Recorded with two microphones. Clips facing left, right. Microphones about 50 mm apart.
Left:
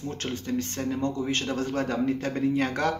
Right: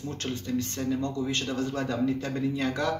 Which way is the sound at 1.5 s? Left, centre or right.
Left.